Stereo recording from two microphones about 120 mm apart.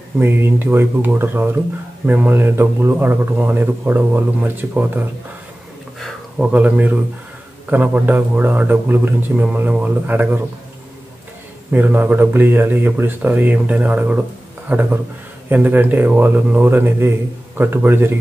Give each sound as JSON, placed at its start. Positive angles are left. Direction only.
{"t": 0.2, "sound": "a man's voice", "side_deg": -20}
{"t": 6.3, "sound": "a man's voice", "side_deg": -10}
{"t": 11.7, "sound": "a man's voice", "side_deg": -15}